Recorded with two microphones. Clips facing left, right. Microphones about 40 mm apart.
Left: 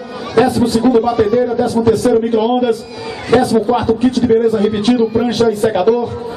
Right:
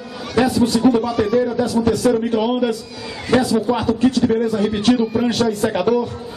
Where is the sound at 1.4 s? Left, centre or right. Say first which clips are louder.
Left 5 dB; centre.